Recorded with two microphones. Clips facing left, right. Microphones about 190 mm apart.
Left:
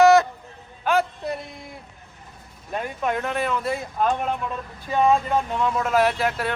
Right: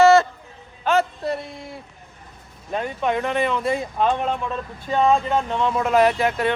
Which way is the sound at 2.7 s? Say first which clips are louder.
Right 3 dB; 5° left (ahead or behind).